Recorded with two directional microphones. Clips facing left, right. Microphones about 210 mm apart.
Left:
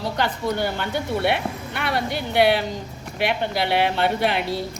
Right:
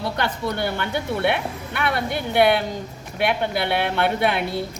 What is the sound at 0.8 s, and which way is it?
Speech, 55° right (ahead or behind).